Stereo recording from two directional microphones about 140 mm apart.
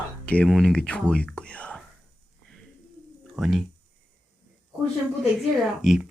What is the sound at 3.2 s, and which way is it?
Speech, centre (ahead or behind).